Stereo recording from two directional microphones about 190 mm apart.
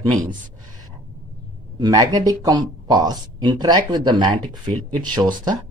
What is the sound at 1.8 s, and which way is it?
Speech, 20° right (ahead or behind).